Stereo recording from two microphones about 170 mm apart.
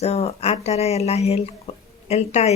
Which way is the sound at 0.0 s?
35° left (ahead or behind).